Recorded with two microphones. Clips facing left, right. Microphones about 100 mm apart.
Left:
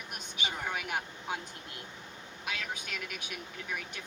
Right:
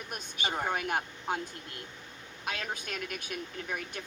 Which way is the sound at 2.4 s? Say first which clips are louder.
Right 2 dB; 45° right (ahead or behind).